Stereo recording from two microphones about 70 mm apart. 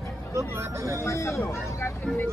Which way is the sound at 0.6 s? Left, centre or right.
Right.